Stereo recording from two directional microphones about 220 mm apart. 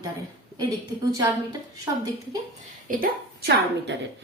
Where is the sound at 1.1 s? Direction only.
15° right (ahead or behind).